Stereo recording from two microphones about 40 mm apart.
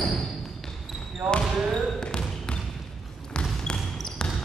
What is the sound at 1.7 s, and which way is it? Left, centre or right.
Basketball bounce, centre.